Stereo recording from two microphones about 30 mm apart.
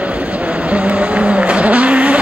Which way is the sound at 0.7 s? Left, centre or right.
Right.